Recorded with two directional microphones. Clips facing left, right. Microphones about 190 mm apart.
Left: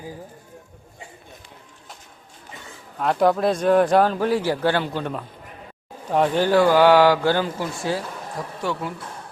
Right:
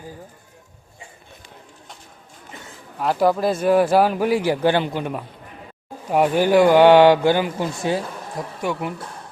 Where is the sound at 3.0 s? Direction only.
5° right (ahead or behind).